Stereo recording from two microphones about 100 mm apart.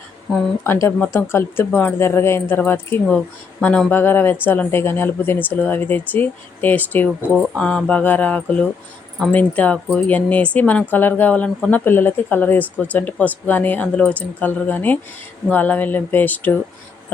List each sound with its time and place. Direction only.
0.6 s speech: 25° left (ahead or behind)
7.5 s speech: 5° left (ahead or behind)